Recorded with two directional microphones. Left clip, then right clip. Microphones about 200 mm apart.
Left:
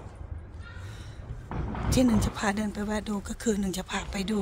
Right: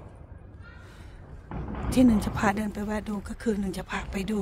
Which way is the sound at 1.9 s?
5° right (ahead or behind).